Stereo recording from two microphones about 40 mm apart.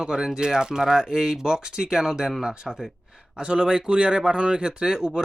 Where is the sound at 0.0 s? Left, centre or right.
Centre.